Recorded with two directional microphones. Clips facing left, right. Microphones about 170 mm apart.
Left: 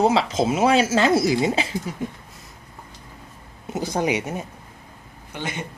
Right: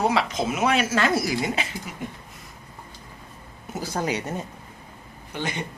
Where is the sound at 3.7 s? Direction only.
20° left (ahead or behind).